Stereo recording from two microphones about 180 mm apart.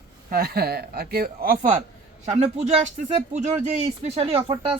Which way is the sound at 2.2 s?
35° right (ahead or behind).